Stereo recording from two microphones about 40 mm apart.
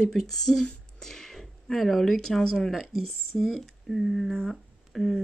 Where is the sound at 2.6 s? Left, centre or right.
Centre.